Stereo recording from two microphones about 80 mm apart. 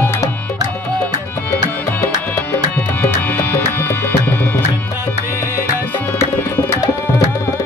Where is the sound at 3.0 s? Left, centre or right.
Left.